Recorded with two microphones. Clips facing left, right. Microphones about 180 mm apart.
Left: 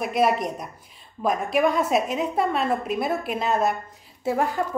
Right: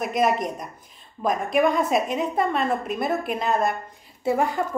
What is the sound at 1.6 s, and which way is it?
A woman's voice, 5° left (ahead or behind).